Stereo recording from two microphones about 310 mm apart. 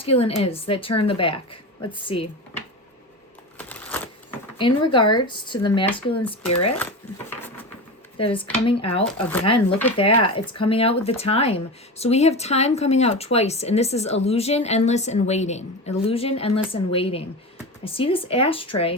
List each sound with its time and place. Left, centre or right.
0.0 s a woman's voice: centre
3.6 s a sound: centre
4.5 s a woman's voice: centre
8.2 s a woman's voice: centre